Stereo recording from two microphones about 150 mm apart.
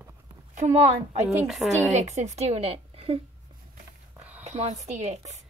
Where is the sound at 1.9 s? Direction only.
50° right (ahead or behind).